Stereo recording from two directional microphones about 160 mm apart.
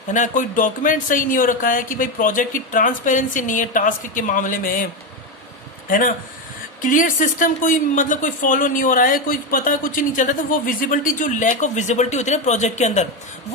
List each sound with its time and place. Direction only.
0.1 s speech: 50° left (ahead or behind)
5.9 s speech: 60° left (ahead or behind)